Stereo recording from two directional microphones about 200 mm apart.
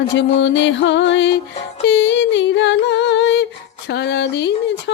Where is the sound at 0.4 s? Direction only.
65° left (ahead or behind).